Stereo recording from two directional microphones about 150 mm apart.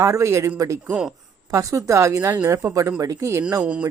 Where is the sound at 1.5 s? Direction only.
20° right (ahead or behind).